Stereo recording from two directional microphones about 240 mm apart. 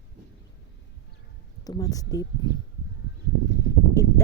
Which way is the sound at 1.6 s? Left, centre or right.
Centre.